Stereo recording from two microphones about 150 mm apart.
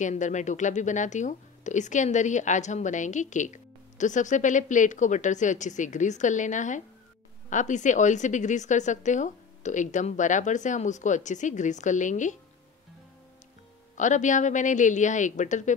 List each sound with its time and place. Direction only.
0.0 s speech: 55° left (ahead or behind)
13.9 s speech: 55° left (ahead or behind)